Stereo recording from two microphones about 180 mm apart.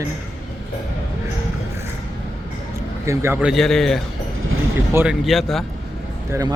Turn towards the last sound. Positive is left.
turn(degrees=-20)  # may be behind; listen again after turning